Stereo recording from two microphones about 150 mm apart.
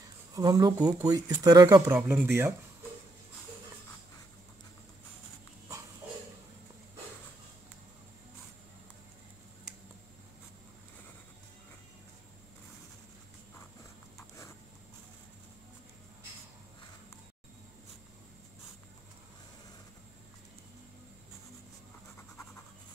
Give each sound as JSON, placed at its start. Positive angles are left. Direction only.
{"t": 0.3, "sound": "speech", "side_deg": -25}
{"t": 1.9, "sound": "speech", "side_deg": -15}